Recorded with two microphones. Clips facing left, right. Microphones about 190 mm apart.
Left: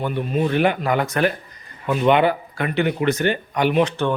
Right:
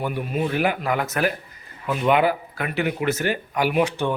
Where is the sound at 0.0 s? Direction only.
10° right (ahead or behind).